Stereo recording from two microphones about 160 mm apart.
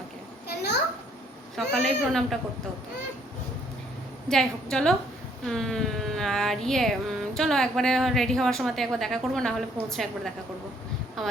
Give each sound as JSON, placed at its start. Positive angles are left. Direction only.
{"t": 0.4, "sound": "a sound", "side_deg": 90}
{"t": 1.5, "sound": "a woman's voice", "side_deg": 0}
{"t": 4.3, "sound": "a woman's voice", "side_deg": 5}